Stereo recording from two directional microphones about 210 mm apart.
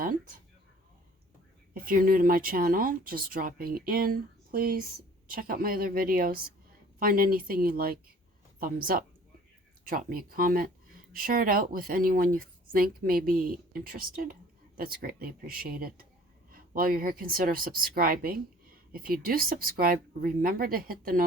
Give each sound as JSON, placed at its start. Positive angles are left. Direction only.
{"t": 1.7, "sound": "speech", "side_deg": -40}